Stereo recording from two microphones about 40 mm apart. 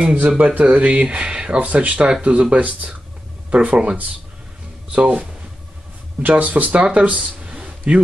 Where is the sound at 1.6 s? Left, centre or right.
Right.